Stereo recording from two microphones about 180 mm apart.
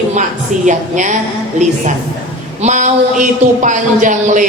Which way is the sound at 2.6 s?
40° right (ahead or behind).